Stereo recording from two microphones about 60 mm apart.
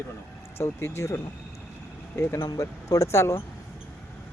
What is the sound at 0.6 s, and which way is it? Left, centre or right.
Speech, left.